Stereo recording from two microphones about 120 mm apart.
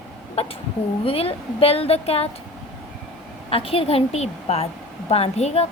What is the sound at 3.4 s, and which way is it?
A woman's voice, 55° left (ahead or behind).